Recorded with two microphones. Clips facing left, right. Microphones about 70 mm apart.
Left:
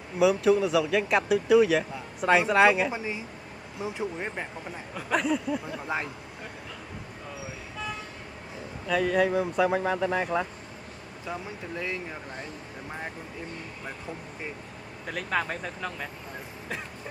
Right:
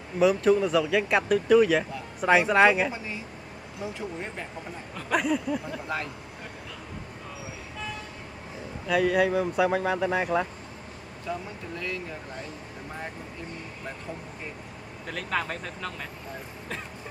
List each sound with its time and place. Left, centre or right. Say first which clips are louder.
0.2 s speech: even; centre
5.1 s speech: right 1 dB; centre
8.8 s speech: right 1 dB; centre
11.3 s speech: right 2 dB; centre
15.0 s speech: left 1 dB; centre